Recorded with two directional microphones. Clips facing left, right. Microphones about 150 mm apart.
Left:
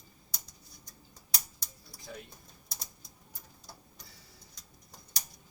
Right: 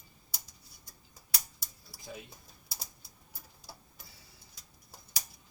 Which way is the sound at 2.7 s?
5° right (ahead or behind).